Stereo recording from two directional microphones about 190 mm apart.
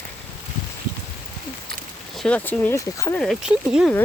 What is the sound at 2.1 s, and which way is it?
Speech, 5° left (ahead or behind).